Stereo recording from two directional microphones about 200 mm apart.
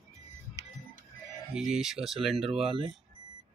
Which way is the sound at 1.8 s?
Centre (ahead or behind).